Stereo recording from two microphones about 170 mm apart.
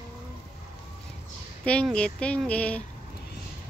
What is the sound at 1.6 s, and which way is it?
Speech, 5° left (ahead or behind).